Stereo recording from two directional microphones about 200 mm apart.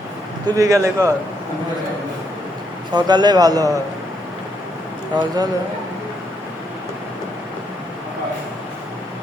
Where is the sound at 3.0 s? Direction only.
20° right (ahead or behind).